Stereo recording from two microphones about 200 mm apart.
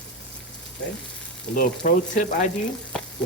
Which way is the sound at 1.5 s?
45° left (ahead or behind).